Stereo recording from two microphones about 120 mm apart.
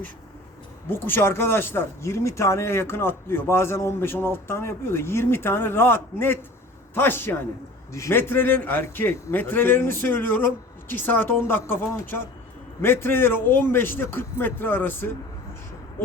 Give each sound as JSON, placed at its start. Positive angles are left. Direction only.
{"t": 0.9, "sound": "a man's voice", "side_deg": 20}